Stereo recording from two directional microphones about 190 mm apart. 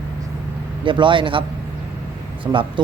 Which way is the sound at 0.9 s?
25° right (ahead or behind).